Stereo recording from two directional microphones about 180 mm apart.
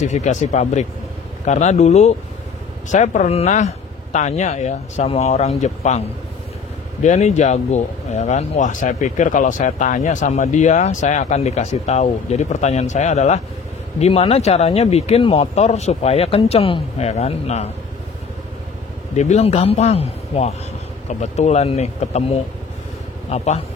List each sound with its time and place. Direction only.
0.0 s speech: 40° left (ahead or behind)
19.1 s speech: 40° left (ahead or behind)